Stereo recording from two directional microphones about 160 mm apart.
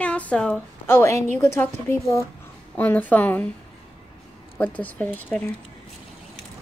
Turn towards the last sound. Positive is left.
turn(degrees=10)  # may be behind; listen again after turning